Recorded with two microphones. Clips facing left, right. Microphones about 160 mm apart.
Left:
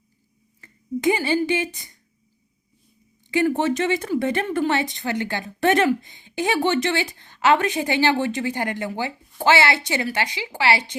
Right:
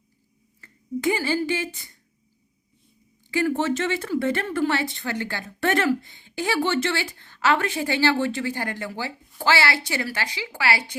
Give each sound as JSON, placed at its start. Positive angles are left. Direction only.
{"t": 0.6, "sound": "speech", "side_deg": 20}
{"t": 3.2, "sound": "speech", "side_deg": 20}